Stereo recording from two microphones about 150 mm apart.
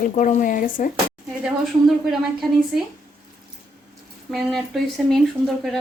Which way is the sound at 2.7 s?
5° right (ahead or behind).